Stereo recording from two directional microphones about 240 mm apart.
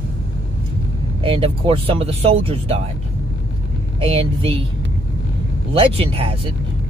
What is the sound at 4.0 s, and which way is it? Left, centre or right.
Speech, right.